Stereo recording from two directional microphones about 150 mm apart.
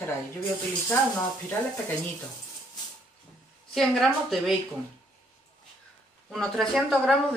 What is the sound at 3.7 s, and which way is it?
Speech, centre (ahead or behind).